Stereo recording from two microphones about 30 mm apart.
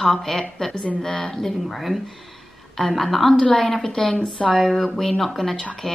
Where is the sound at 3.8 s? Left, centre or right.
Left.